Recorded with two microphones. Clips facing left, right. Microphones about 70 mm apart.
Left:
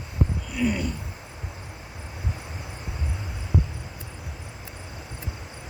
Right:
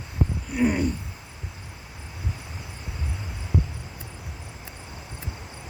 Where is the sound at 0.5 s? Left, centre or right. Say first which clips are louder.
Right 3 dB; right.